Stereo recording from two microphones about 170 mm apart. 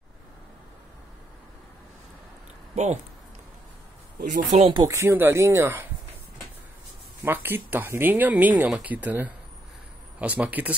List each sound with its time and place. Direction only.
2.7 s speech: 40° right (ahead or behind)
4.2 s speech: 50° right (ahead or behind)
4.7 s speech: 20° right (ahead or behind)
7.2 s speech: 10° right (ahead or behind)